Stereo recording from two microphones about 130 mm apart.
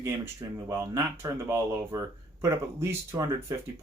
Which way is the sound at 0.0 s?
25° right (ahead or behind).